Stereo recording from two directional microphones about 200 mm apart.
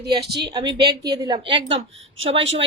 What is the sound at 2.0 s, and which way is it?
Speech, 75° right (ahead or behind).